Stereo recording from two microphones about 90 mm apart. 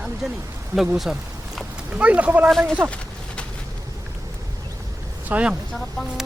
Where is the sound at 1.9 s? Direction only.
15° right (ahead or behind).